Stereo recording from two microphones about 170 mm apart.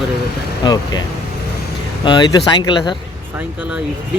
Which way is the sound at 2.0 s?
25° left (ahead or behind).